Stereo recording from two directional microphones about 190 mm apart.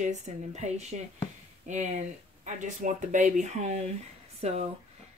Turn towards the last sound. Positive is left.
turn(degrees=-35)  # may be behind; listen again after turning